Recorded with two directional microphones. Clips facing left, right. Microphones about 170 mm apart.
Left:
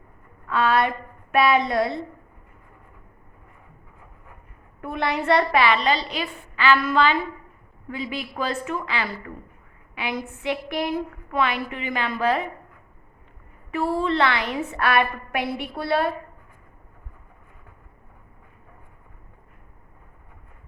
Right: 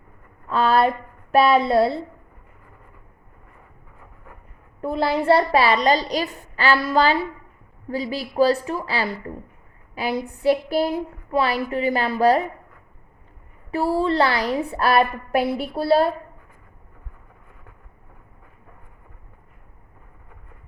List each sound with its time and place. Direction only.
0.4 s a woman's voice: 35° right (ahead or behind)
4.8 s a woman's voice: 30° right (ahead or behind)
13.9 s a woman's voice: 35° right (ahead or behind)